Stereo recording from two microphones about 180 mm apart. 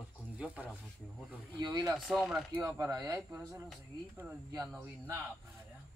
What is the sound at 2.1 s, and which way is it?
Speech, centre (ahead or behind).